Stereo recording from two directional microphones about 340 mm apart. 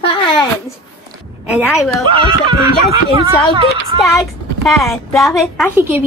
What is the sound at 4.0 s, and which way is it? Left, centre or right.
A woman's voice, centre.